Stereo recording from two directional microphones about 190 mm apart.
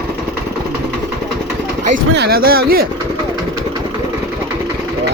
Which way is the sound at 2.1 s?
60° right (ahead or behind).